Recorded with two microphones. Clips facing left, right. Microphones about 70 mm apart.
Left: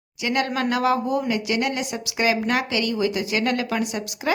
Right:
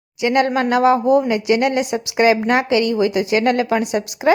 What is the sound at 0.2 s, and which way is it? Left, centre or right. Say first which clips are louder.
Speech: right 7 dB; right.